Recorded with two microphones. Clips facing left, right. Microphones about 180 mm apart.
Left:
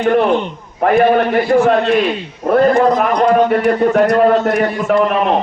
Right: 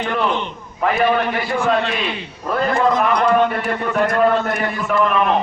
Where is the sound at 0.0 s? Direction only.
50° left (ahead or behind).